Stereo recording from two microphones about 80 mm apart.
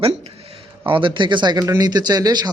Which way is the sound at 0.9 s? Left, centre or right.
Right.